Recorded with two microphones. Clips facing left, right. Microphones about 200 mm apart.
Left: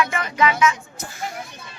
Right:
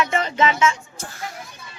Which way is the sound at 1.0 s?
10° left (ahead or behind).